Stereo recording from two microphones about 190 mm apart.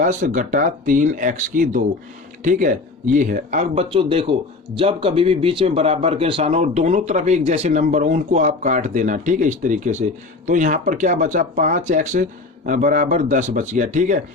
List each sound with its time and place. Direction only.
0.0 s speech: 40° right (ahead or behind)